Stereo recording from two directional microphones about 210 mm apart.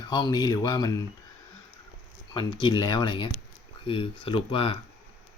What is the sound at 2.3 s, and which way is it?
Speech, 20° left (ahead or behind).